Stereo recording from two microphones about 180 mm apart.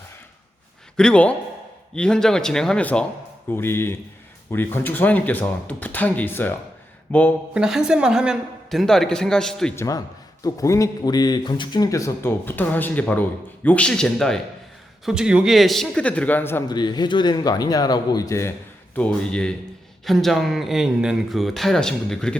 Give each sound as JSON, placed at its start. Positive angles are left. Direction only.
{"t": 0.9, "sound": "a man's voice", "side_deg": 5}
{"t": 7.5, "sound": "a man's voice", "side_deg": -5}
{"t": 9.7, "sound": "a man's voice", "side_deg": 20}
{"t": 16.6, "sound": "a man's voice", "side_deg": 25}